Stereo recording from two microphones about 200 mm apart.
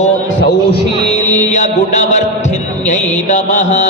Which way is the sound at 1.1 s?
40° left (ahead or behind).